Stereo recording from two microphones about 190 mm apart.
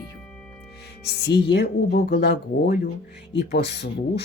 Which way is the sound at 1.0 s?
60° left (ahead or behind).